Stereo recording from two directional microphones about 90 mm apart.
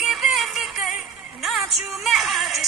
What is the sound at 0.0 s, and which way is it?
Music, 5° right (ahead or behind).